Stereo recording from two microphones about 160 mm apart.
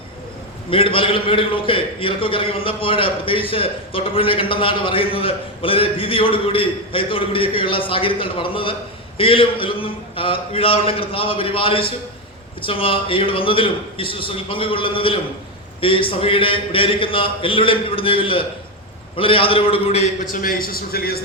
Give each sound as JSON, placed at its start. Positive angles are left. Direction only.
{"t": 0.7, "sound": "a man's voice", "side_deg": 35}
{"t": 20.3, "sound": "a man's voice", "side_deg": 60}